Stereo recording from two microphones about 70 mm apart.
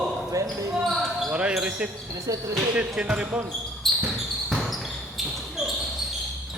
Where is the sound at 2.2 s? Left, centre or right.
Right.